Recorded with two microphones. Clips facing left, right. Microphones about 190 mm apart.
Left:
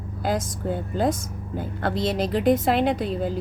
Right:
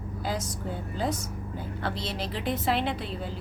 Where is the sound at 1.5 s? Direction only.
50° left (ahead or behind).